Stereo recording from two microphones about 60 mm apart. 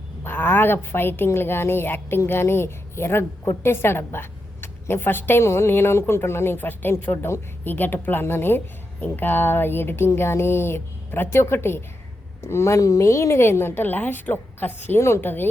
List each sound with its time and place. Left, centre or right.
0.3 s a woman's voice: left
12.4 s a woman's voice: left